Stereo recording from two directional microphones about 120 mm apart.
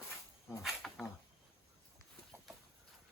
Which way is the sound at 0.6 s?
Centre (ahead or behind).